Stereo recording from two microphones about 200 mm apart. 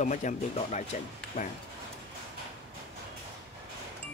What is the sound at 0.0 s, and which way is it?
Speech, 40° left (ahead or behind).